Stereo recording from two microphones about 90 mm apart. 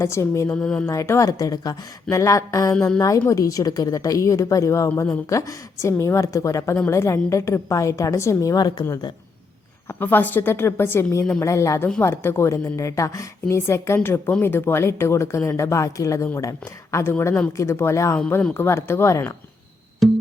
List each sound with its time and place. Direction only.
0.0 s speech: 30° left (ahead or behind)
0.5 s music: 10° left (ahead or behind)
0.9 s speech: 30° left (ahead or behind)
10.0 s a woman's voice: 20° left (ahead or behind)
20.0 s music: centre (ahead or behind)